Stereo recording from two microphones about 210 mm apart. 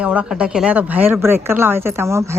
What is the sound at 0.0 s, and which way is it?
A woman's voice, 5° right (ahead or behind).